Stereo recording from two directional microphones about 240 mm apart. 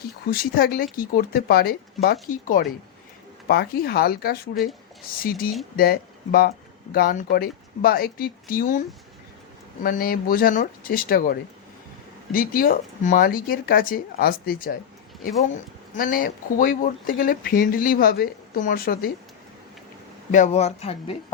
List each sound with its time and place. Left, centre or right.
0.3 s speech: left
9.8 s speech: left
20.3 s speech: left